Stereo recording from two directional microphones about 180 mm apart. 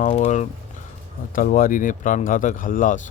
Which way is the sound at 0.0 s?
40° left (ahead or behind).